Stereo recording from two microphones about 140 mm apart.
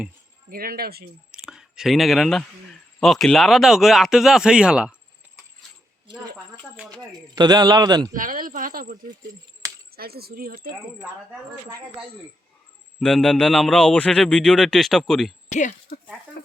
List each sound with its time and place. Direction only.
0.5 s speech: 90° right
1.3 s clicking: 5° right (ahead or behind)
3.0 s a man's voice: 5° left (ahead or behind)
7.1 s a man's voice: 30° right (ahead or behind)
8.1 s speech: 75° right (ahead or behind)
11.0 s speech: 10° right (ahead or behind)
13.0 s a man's voice: 5° left (ahead or behind)
15.4 s speech: 60° left (ahead or behind)